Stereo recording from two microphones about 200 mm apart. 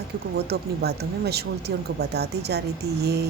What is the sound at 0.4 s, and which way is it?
Speech, 55° right (ahead or behind).